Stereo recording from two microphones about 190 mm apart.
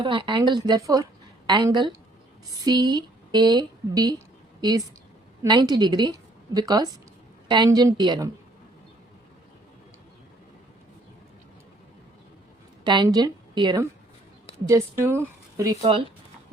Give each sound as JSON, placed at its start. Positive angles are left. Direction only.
{"t": 0.0, "sound": "a woman's voice", "side_deg": -25}
{"t": 5.4, "sound": "a woman's voice", "side_deg": -20}
{"t": 12.8, "sound": "a woman's voice", "side_deg": -25}
{"t": 14.7, "sound": "a woman's voice", "side_deg": -10}